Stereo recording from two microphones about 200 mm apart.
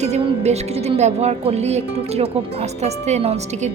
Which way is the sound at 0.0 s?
30° right (ahead or behind).